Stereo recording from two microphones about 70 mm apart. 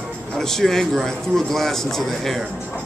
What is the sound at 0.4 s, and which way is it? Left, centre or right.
Speech, centre.